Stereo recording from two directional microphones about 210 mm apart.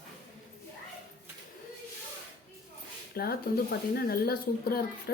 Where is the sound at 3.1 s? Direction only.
45° left (ahead or behind).